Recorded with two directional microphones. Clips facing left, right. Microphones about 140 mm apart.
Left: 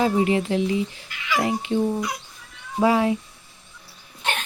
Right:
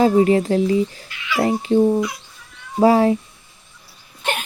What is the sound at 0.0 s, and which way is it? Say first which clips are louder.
Speech: right 6 dB; 40° right (ahead or behind).